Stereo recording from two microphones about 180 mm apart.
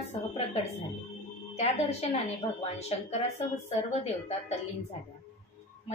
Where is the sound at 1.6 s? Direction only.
35° left (ahead or behind).